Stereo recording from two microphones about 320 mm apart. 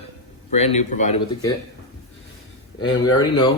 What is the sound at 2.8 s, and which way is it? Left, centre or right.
Speech, centre.